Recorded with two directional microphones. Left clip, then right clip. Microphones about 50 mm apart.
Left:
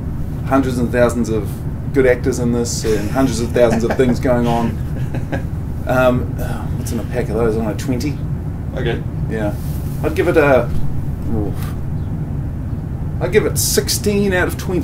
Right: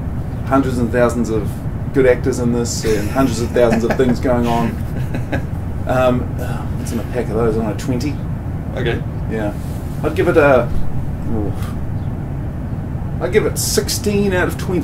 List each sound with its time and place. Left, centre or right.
0.5 s speech: left
2.8 s speech: right
3.2 s speech: left
3.7 s speech: right
4.0 s speech: left
4.4 s speech: right
5.9 s speech: left
10.0 s speech: left
13.2 s speech: left